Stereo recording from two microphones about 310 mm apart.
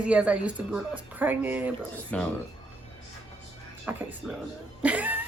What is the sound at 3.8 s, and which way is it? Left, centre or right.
Speech, centre.